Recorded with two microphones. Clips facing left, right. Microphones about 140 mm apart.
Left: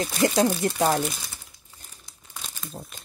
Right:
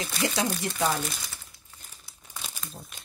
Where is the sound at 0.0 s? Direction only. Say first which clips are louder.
Left 7 dB; 50° left (ahead or behind).